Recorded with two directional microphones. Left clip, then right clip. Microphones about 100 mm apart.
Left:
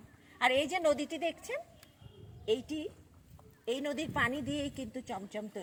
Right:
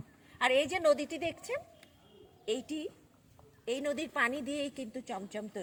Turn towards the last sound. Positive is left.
turn(degrees=-20)  # may be behind; listen again after turning